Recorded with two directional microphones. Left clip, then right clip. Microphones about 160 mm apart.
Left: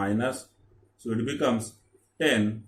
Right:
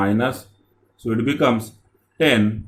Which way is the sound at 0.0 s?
50° right (ahead or behind).